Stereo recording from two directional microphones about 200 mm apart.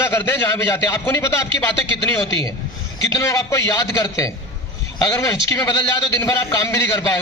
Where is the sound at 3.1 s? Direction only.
15° left (ahead or behind).